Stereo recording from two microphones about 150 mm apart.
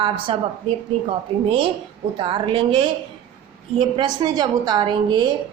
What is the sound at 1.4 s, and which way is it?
A woman's voice, 35° right (ahead or behind).